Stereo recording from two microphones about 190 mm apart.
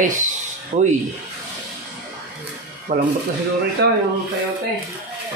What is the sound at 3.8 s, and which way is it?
Speech, 60° right (ahead or behind).